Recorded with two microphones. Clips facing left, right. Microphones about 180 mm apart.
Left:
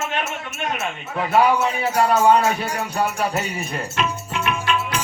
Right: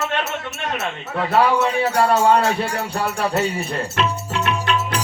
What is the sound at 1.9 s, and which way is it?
Music, 30° right (ahead or behind).